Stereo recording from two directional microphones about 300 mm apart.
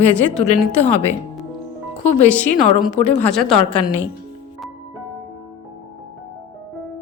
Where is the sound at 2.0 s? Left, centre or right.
Left.